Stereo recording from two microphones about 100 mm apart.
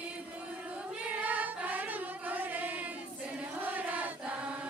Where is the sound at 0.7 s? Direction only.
15° right (ahead or behind).